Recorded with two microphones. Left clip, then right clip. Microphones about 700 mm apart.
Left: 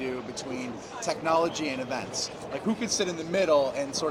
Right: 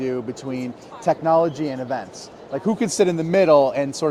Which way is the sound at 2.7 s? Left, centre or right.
Right.